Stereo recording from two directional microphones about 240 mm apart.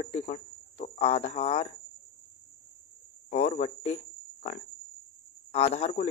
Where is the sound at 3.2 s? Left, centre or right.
Left.